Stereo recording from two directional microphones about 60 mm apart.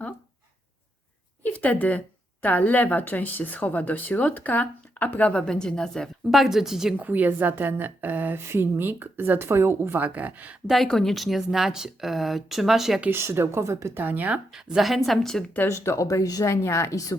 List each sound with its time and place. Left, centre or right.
1.5 s a woman's voice: left
5.4 s a woman's voice: centre
6.3 s a woman's voice: centre
6.9 s a woman's voice: right
10.1 s speech: right
10.8 s speech: centre
13.1 s speech: right
13.9 s a woman's voice: right
14.5 s speech: centre
15.7 s speech: left
16.5 s a woman's voice: left